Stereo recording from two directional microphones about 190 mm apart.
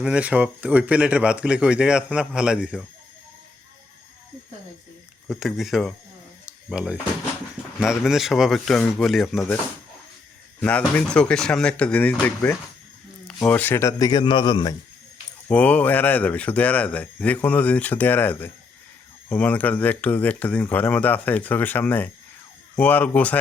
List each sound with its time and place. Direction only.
0.0 s speech: 5° right (ahead or behind)
5.3 s speech: centre (ahead or behind)
6.4 s a sound: 5° right (ahead or behind)
7.8 s speech: centre (ahead or behind)
10.6 s a man's voice: 5° left (ahead or behind); by 14.8 s 20° left (ahead or behind)
15.4 s speech: 5° left (ahead or behind)